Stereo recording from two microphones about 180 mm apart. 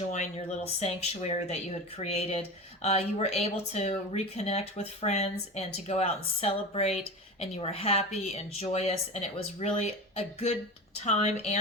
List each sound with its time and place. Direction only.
0.1 s a woman's voice: 40° left (ahead or behind)